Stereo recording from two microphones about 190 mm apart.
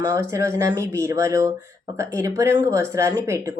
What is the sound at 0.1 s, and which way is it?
Speech, 15° right (ahead or behind).